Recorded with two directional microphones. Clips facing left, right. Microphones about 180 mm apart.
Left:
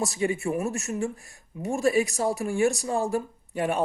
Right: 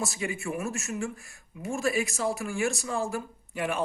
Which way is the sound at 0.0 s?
35° left (ahead or behind).